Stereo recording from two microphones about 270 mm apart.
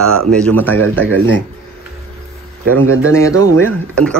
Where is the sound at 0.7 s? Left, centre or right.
Right.